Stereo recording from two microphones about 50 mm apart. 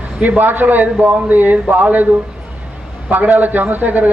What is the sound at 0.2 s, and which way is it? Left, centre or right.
A man's voice, right.